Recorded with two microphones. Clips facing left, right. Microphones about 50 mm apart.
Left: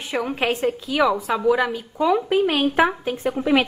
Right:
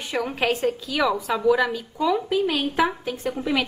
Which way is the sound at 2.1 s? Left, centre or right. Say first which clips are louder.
Left 4 dB; left.